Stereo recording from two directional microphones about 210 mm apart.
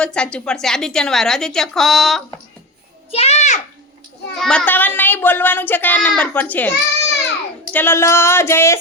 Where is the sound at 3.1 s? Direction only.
30° left (ahead or behind).